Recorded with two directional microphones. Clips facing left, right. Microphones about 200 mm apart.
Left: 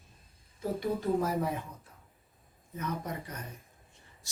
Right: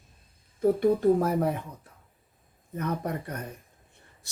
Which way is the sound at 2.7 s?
60° right (ahead or behind).